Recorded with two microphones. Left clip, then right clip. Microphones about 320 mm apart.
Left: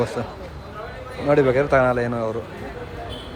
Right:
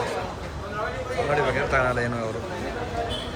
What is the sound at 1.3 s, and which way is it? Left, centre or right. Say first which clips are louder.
Speech: left 8 dB; centre.